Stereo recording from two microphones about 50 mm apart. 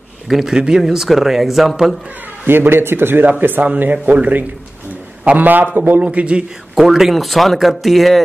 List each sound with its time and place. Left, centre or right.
0.3 s speech: centre
2.4 s a man's voice: right
6.1 s a man's voice: right
6.7 s speech: centre